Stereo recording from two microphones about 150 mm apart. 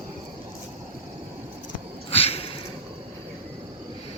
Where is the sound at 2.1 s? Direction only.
40° left (ahead or behind).